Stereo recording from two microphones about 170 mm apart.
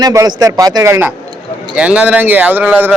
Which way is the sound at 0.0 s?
20° right (ahead or behind).